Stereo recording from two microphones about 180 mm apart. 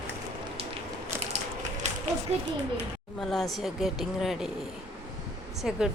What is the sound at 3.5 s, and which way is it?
Speech, centre (ahead or behind).